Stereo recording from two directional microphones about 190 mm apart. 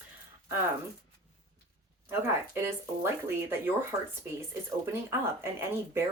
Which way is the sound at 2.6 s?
10° right (ahead or behind).